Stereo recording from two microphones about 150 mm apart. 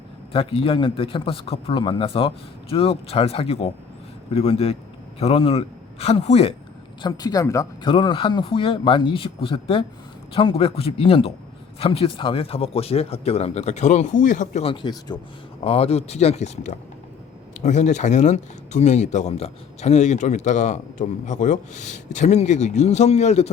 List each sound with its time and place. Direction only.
0.3 s a man's voice: 40° left (ahead or behind)
7.0 s speech: 25° left (ahead or behind)
7.9 s a man's voice: 35° left (ahead or behind); by 14.6 s 60° left (ahead or behind)
14.6 s a man's voice: 35° left (ahead or behind)
15.6 s speech: 40° left (ahead or behind)